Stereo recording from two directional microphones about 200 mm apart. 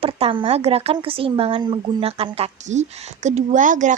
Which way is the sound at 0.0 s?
25° right (ahead or behind).